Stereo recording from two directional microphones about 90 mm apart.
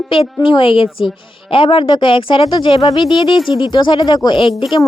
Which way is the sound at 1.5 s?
75° left (ahead or behind).